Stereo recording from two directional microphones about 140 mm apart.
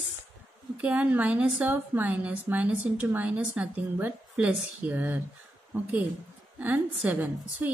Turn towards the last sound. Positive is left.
turn(degrees=-15)  # may be behind; listen again after turning